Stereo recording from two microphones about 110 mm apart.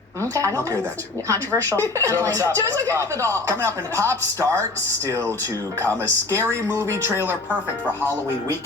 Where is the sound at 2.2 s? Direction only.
25° right (ahead or behind).